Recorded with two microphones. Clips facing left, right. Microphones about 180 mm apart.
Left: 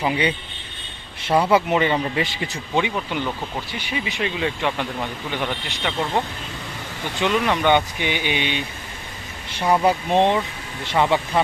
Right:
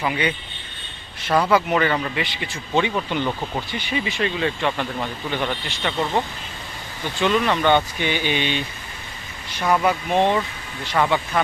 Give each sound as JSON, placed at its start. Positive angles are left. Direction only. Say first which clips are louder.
{"t": 0.0, "sound": "speech", "louder": "left 2 dB", "side_deg": 25}
{"t": 1.5, "sound": "speech", "louder": "left 1 dB", "side_deg": 25}
{"t": 2.1, "sound": "speech", "louder": "left 3 dB", "side_deg": 40}
{"t": 2.7, "sound": "speech", "louder": "right 2 dB", "side_deg": 10}
{"t": 9.6, "sound": "speech", "louder": "left 1 dB", "side_deg": 30}